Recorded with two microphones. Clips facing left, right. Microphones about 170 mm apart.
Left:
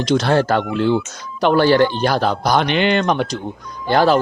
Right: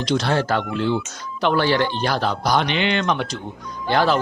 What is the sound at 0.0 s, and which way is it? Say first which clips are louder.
Speech: left 5 dB; 45° left (ahead or behind).